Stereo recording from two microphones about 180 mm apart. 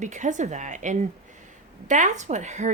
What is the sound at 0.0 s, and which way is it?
A woman's voice, 45° right (ahead or behind).